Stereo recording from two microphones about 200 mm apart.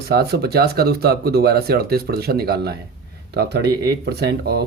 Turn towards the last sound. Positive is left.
turn(degrees=-55)  # may be behind; listen again after turning